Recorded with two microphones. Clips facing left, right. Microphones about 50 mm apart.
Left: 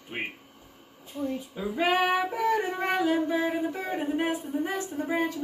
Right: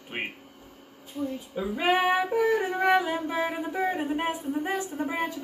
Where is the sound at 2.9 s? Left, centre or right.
Centre.